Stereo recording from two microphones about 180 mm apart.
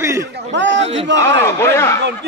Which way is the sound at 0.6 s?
85° right.